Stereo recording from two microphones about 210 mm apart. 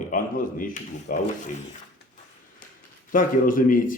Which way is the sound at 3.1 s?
40° left (ahead or behind).